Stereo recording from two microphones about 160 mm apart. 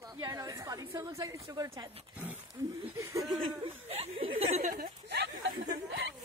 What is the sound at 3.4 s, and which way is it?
Speech, 30° right (ahead or behind).